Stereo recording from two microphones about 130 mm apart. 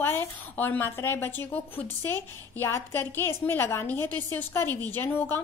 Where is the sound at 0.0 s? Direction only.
15° left (ahead or behind).